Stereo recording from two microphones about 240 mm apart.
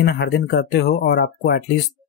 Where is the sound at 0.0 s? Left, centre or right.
Left.